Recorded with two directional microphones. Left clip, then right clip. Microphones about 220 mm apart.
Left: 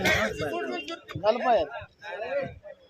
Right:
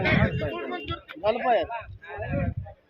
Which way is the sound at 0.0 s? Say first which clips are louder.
Even; 60° left (ahead or behind).